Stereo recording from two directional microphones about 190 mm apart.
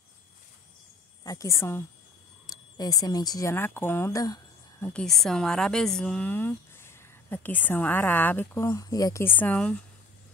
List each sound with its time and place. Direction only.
1.2 s a woman's voice: 15° left (ahead or behind)
4.8 s a woman's voice: 5° left (ahead or behind)